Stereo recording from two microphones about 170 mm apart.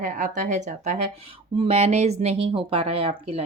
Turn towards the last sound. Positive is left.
turn(degrees=-35)  # may be behind; listen again after turning